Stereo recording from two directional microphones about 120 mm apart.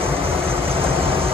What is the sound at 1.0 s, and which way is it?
Vehicle, 50° right (ahead or behind).